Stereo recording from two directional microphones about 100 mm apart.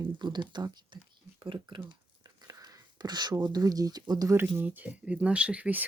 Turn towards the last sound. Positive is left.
turn(degrees=-15)  # may be behind; listen again after turning